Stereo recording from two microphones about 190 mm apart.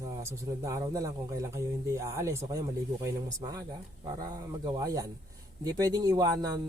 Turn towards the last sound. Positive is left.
turn(degrees=-20)  # may be behind; listen again after turning